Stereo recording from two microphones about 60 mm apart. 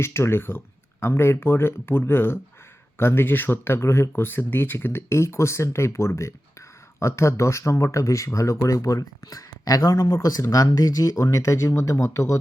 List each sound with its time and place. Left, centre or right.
0.0 s speech: left